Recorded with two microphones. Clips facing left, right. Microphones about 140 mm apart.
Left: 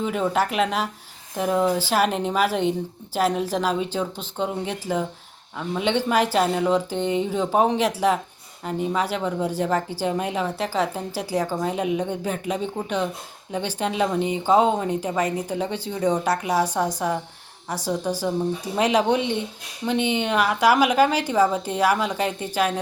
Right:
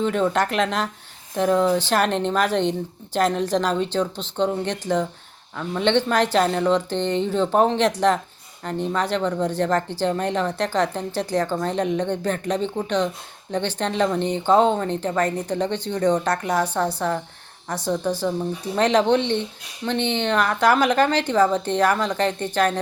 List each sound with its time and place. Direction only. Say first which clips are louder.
0.0 s speech: right 2 dB; 5° left (ahead or behind)